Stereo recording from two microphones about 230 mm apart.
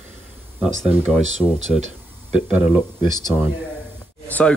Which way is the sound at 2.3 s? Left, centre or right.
Centre.